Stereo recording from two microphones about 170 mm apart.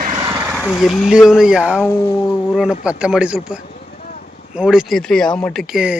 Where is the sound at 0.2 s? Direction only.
15° right (ahead or behind).